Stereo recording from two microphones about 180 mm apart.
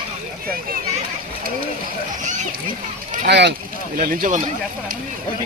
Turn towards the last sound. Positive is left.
turn(degrees=-50)  # may be behind; listen again after turning